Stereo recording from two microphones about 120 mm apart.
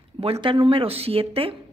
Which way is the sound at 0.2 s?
50° right (ahead or behind).